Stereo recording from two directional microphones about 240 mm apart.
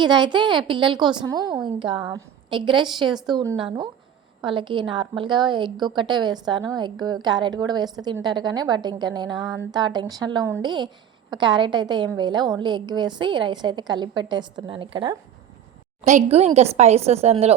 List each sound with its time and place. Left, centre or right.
0.0 s a woman's voice: centre